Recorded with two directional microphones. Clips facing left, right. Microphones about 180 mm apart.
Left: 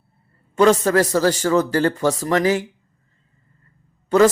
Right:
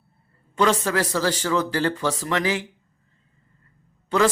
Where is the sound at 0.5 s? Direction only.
45° left (ahead or behind).